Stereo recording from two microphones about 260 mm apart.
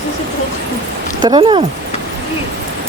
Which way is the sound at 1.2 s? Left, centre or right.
Centre.